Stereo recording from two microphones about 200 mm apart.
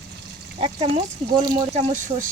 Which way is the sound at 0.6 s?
30° right (ahead or behind).